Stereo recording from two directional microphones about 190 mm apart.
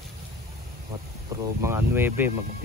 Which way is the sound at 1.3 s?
15° right (ahead or behind).